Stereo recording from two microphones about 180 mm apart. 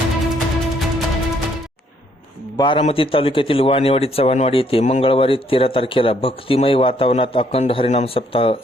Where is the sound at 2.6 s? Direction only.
30° left (ahead or behind).